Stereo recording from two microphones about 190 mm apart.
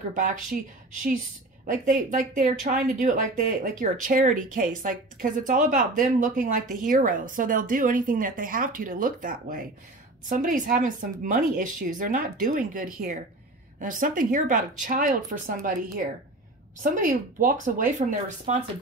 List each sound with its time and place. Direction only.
0.1 s speech: 45° right (ahead or behind)
1.7 s speech: 45° right (ahead or behind)